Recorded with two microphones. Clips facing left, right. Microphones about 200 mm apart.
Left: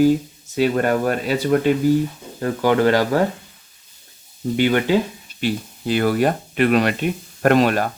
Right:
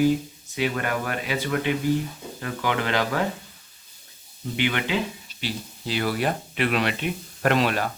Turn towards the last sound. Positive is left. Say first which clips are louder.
# left 6 dB
turn(degrees=45)  # may be behind; listen again after turning